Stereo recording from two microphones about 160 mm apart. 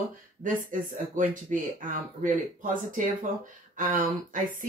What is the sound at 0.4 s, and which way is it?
Speech, 55° right (ahead or behind).